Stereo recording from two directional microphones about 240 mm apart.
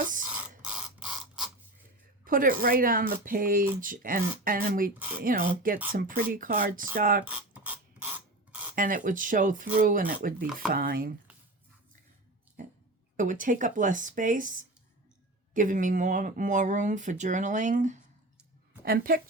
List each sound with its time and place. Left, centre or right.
0.6 s a sound: centre
2.2 s speech: right
7.5 s ratchet: centre
8.7 s speech: right
10.3 s speech: centre
10.7 s speech: right
13.1 s speech: right